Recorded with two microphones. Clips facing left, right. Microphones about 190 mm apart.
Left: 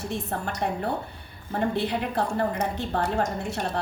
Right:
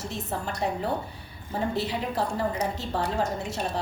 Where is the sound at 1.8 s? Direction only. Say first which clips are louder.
Left 2 dB; 55° left (ahead or behind).